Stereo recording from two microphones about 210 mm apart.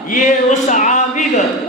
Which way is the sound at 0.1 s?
35° left (ahead or behind).